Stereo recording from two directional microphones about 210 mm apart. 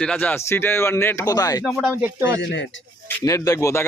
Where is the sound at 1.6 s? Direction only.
Centre (ahead or behind).